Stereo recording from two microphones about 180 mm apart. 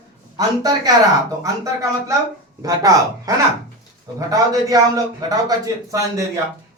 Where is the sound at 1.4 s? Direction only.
20° right (ahead or behind).